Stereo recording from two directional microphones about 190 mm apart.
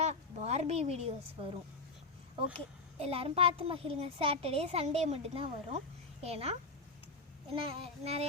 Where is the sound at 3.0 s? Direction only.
30° right (ahead or behind).